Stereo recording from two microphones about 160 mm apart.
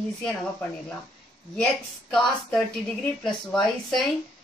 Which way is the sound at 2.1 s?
5° left (ahead or behind).